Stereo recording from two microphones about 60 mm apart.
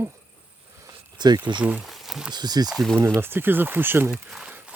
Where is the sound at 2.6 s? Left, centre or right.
Right.